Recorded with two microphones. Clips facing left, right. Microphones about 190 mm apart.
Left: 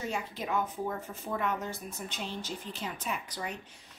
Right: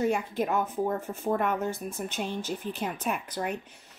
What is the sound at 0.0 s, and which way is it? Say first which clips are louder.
A woman's voice: right 9 dB; 55° right (ahead or behind).